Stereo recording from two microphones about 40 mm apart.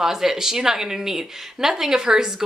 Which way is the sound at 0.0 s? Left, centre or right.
Centre.